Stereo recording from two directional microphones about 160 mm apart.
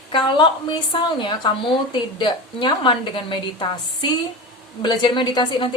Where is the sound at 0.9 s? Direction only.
30° left (ahead or behind).